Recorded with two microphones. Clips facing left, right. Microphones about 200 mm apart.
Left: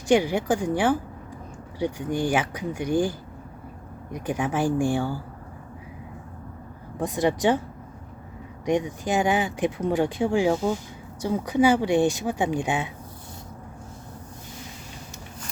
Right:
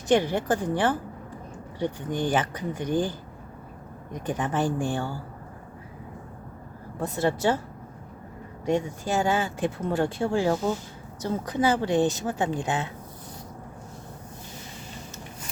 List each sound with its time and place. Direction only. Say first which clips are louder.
0.1 s speech: left 2 dB; 10° left (ahead or behind)
7.0 s speech: left 2 dB; 15° left (ahead or behind)
8.6 s speech: left 2 dB; 15° left (ahead or behind)